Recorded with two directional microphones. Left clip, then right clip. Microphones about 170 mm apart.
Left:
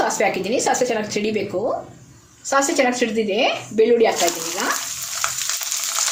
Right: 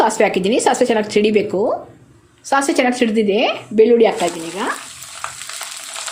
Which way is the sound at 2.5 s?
50° right (ahead or behind).